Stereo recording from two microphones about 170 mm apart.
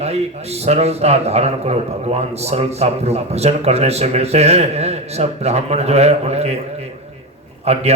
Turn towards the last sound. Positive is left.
turn(degrees=-40)  # may be behind; listen again after turning